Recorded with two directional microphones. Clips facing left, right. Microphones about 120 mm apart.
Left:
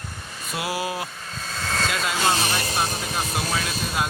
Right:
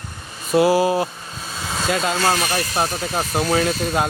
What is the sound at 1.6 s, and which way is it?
Vehicle, 10° right (ahead or behind).